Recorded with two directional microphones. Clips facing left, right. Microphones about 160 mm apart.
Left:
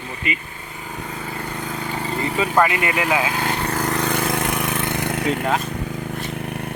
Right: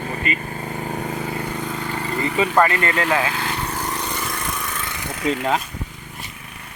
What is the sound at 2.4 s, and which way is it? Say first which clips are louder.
Speech: right 1 dB; 5° left (ahead or behind).